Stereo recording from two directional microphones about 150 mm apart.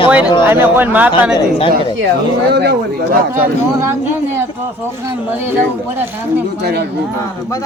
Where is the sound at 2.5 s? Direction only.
90° right.